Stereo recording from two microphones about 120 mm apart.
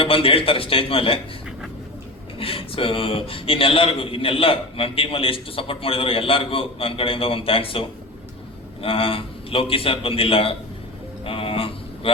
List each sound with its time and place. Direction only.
0.0 s a man's voice: 50° left (ahead or behind)
2.4 s a man's voice: 50° left (ahead or behind)
11.3 s a sound: 50° left (ahead or behind)